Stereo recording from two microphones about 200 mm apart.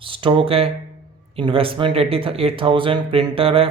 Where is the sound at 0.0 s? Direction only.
25° right (ahead or behind).